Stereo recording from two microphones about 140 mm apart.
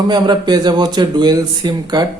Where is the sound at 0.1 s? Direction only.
30° right (ahead or behind).